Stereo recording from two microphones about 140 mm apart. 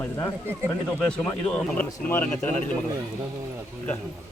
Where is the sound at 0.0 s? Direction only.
20° left (ahead or behind).